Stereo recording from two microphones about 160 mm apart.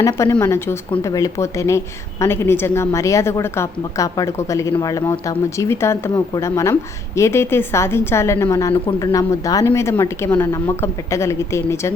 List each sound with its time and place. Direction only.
0.0 s a woman's voice: 15° left (ahead or behind)